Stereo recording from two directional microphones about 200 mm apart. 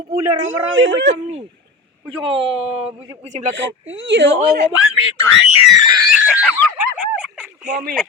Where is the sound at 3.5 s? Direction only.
65° right (ahead or behind).